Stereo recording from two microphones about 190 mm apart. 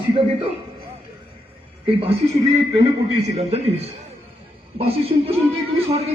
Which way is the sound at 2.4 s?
20° right (ahead or behind).